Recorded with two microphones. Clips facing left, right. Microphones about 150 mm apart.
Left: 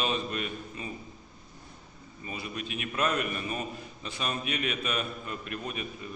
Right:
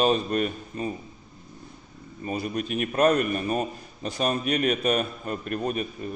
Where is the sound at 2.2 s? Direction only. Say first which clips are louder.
Right 9 dB; 45° right (ahead or behind).